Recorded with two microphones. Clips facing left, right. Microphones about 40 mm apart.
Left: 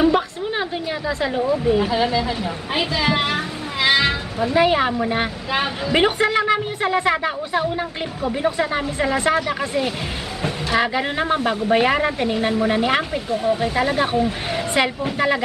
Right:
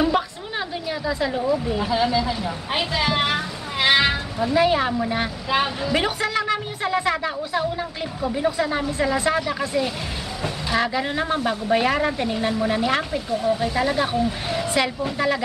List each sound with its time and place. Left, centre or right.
0.0 s a sound: centre
1.7 s speech: centre
3.8 s cat: centre
4.4 s speech: centre